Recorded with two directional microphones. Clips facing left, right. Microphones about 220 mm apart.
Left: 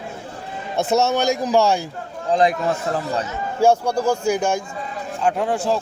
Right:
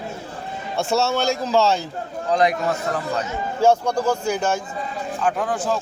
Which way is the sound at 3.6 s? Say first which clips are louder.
Left 1 dB; 10° left (ahead or behind).